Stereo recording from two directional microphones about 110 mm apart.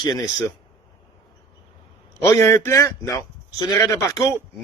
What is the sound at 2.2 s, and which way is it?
A man's voice, 25° left (ahead or behind).